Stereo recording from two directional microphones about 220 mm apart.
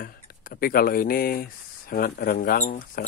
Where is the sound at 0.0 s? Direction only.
40° left (ahead or behind).